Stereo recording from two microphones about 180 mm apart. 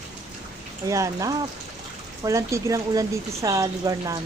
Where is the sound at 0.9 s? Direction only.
15° right (ahead or behind).